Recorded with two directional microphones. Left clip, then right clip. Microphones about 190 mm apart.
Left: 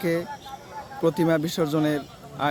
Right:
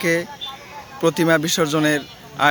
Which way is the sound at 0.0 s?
Centre (ahead or behind).